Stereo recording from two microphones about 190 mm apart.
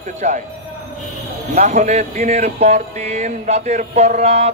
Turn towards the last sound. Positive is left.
turn(degrees=-35)  # may be behind; listen again after turning